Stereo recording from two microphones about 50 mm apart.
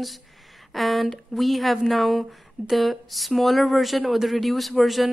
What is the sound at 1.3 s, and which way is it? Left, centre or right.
Speech, centre.